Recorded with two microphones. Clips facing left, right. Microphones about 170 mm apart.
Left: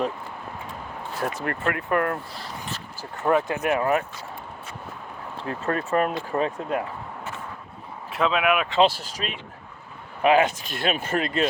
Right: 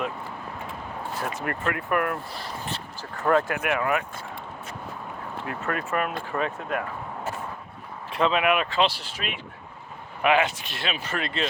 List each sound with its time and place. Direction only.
1.2 s speech: 35° left (ahead or behind)
3.0 s speech: 15° left (ahead or behind)
3.6 s speech: 35° left (ahead or behind)
5.4 s speech: 35° left (ahead or behind)
8.1 s speech: centre (ahead or behind)
8.8 s speech: 40° left (ahead or behind)